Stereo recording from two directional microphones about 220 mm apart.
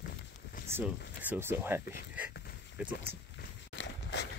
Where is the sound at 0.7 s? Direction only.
10° right (ahead or behind).